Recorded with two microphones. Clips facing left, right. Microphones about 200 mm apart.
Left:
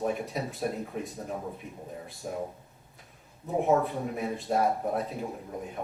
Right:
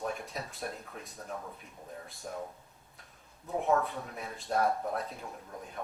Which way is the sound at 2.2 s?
10° left (ahead or behind).